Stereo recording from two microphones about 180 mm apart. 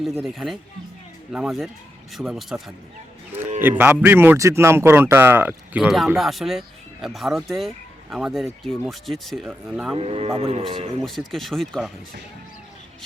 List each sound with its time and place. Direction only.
0.0 s speech: centre (ahead or behind)
9.5 s speech: 10° right (ahead or behind)
9.9 s speech: 30° right (ahead or behind)
11.0 s speech: centre (ahead or behind)